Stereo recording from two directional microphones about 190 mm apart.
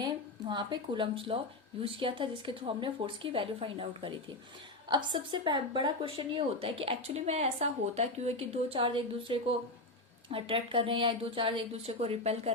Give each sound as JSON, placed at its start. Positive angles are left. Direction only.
{"t": 0.0, "sound": "a woman's voice", "side_deg": -25}